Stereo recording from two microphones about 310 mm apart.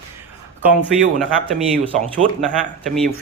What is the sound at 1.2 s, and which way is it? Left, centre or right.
Speech, centre.